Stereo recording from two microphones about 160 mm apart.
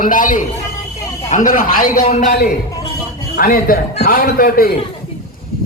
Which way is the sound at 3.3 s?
60° left (ahead or behind).